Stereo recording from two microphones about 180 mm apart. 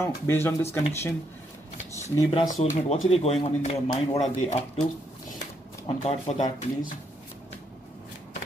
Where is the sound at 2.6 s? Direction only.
35° left (ahead or behind).